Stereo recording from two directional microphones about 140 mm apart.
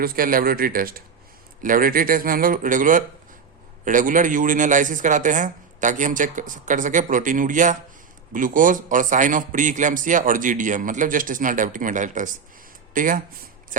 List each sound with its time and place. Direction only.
0.0 s a man's voice: 90° right; by 13.2 s 75° right (ahead or behind)